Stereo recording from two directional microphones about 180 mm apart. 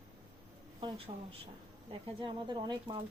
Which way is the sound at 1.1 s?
35° right (ahead or behind).